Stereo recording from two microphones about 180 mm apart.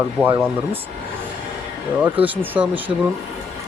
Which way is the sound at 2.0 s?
10° right (ahead or behind).